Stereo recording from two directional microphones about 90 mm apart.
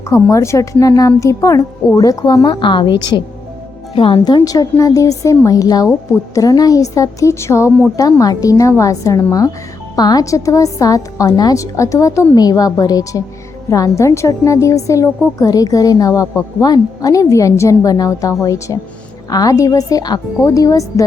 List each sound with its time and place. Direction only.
0.1 s a woman's voice: 35° left (ahead or behind)
2.5 s a woman's voice: 65° left (ahead or behind)
3.9 s speech: 80° left
4.3 s a woman's voice: 45° left (ahead or behind); by 7.7 s 30° left (ahead or behind)
7.9 s a woman's voice: 40° left (ahead or behind)